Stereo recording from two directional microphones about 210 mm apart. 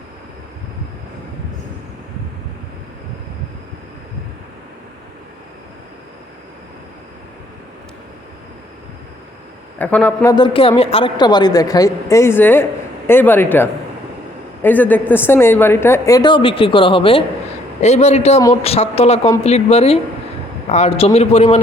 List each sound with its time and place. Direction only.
9.7 s speech: 5° left (ahead or behind)
10.3 s a woman's voice: 25° left (ahead or behind)